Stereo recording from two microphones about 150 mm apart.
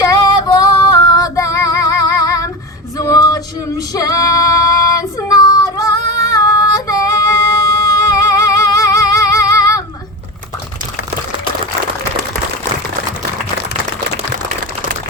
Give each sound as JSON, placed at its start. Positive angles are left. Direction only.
{"t": 0.0, "sound": "female singing", "side_deg": 25}